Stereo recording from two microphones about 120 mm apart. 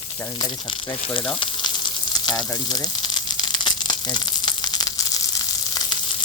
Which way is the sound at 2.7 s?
35° left (ahead or behind).